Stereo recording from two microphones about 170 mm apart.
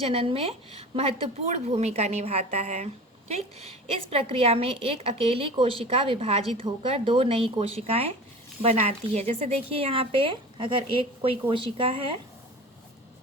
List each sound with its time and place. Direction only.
0.0 s a woman's voice: 35° right (ahead or behind)
4.1 s a woman's voice: 35° right (ahead or behind)